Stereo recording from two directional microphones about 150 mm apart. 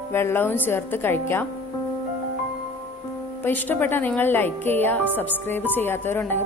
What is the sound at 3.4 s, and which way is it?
A woman's voice, 10° left (ahead or behind).